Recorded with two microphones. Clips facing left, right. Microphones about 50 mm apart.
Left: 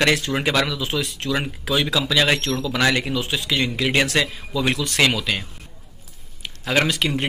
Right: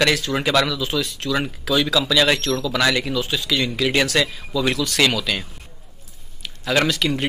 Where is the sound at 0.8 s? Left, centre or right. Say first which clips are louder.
Right 1 dB; left.